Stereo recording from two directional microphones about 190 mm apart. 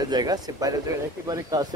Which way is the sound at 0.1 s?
20° right (ahead or behind).